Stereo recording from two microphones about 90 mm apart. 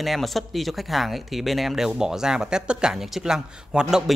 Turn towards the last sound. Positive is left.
turn(degrees=-5)  # may be behind; listen again after turning